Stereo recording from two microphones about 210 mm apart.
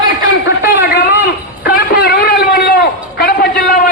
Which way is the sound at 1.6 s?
45° left (ahead or behind).